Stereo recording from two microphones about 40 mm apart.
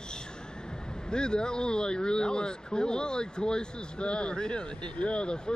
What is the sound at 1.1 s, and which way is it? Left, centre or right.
Speech, left.